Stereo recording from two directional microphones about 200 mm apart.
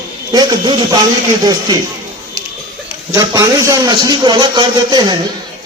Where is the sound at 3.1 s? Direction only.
15° right (ahead or behind).